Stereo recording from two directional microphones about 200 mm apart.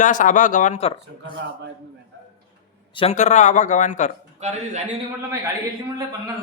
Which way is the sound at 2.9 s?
35° left (ahead or behind).